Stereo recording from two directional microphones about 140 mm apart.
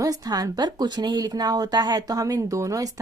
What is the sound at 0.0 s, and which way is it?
A woman's voice, 25° right (ahead or behind).